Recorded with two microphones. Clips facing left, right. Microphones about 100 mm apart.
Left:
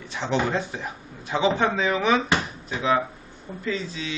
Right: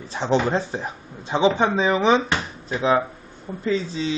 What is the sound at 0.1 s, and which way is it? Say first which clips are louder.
Speech: right 4 dB; 35° right (ahead or behind).